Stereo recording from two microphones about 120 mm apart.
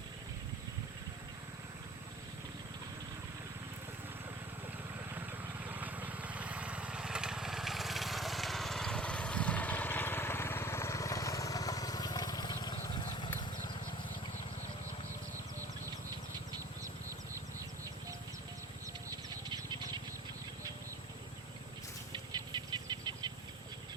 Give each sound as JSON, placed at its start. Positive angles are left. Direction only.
{"t": 5.1, "sound": "vehicle", "side_deg": -15}
{"t": 12.9, "sound": "horse", "side_deg": 40}
{"t": 22.1, "sound": "bird flight", "side_deg": -40}